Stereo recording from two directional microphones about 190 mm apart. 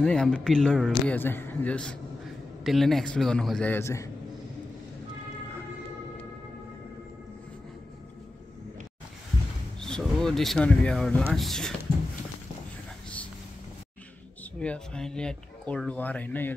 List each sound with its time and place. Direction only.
0.0 s a man's voice: 5° left (ahead or behind)
9.8 s a man's voice: 5° left (ahead or behind)
14.6 s speech: 5° left (ahead or behind)